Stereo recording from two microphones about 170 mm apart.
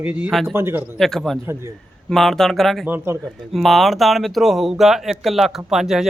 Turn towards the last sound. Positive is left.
turn(degrees=0)  # may be behind; listen again after turning